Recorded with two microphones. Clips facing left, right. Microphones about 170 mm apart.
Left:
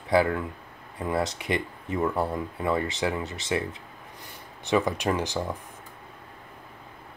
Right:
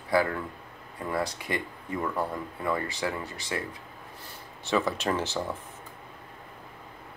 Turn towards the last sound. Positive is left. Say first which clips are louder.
# left 2 dB
turn(degrees=15)  # may be behind; listen again after turning